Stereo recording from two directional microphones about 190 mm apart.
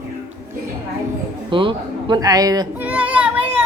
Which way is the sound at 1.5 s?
25° right (ahead or behind).